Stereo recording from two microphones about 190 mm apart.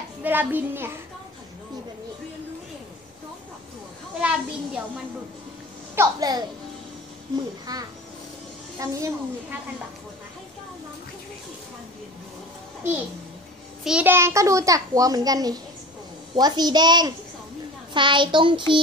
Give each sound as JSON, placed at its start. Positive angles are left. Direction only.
{"t": 0.2, "sound": "a child's voice", "side_deg": -10}
{"t": 4.2, "sound": "a child's voice", "side_deg": -5}
{"t": 5.9, "sound": "child singing", "side_deg": -20}
{"t": 7.7, "sound": "child singing", "side_deg": -20}
{"t": 8.7, "sound": "a child's voice", "side_deg": -15}
{"t": 13.8, "sound": "a child's voice", "side_deg": -10}
{"t": 16.3, "sound": "child singing", "side_deg": -20}